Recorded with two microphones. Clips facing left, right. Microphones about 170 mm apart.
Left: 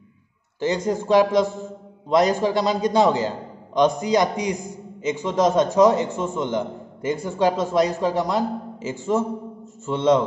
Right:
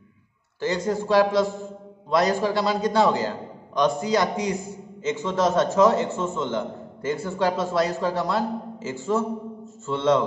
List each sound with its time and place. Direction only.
0.6 s a man's voice: 20° left (ahead or behind)